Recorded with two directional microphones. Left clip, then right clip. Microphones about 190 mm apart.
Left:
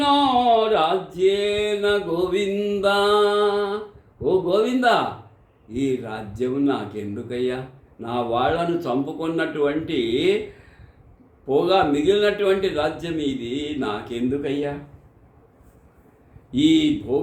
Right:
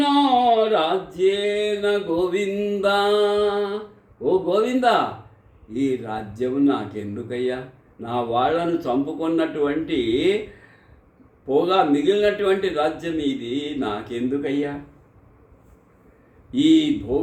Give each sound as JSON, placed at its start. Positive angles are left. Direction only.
{"t": 0.0, "sound": "a sound", "side_deg": 5}
{"t": 4.2, "sound": "a man's voice", "side_deg": 5}
{"t": 11.4, "sound": "a man's voice", "side_deg": 5}
{"t": 16.5, "sound": "a man's voice", "side_deg": 5}